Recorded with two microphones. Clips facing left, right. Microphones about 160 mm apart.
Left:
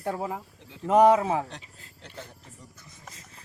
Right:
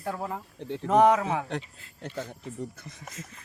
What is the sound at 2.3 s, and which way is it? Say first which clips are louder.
Speech: right 13 dB; 65° right (ahead or behind).